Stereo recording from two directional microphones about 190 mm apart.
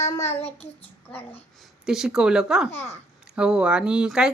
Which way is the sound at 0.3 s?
35° left (ahead or behind).